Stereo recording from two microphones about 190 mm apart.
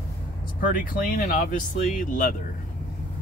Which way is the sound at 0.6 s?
45° left (ahead or behind).